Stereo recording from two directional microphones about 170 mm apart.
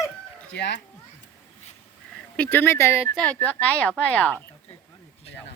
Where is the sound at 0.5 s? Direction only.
90° left.